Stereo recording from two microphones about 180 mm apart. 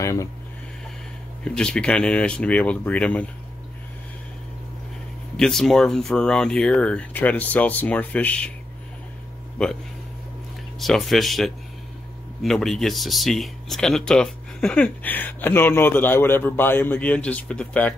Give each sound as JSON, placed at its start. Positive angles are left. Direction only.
{"t": 0.0, "sound": "speech", "side_deg": 15}
{"t": 1.4, "sound": "speech", "side_deg": 5}
{"t": 5.4, "sound": "speech", "side_deg": 0}
{"t": 9.6, "sound": "speech", "side_deg": 5}
{"t": 10.8, "sound": "speech", "side_deg": 0}